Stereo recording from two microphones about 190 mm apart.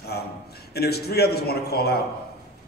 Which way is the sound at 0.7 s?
55° left (ahead or behind).